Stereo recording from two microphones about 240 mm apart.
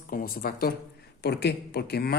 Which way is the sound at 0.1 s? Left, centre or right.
Left.